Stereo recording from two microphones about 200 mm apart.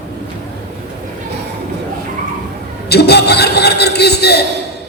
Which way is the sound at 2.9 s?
55° left (ahead or behind).